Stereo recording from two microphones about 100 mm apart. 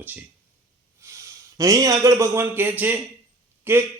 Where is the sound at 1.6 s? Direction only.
35° right (ahead or behind).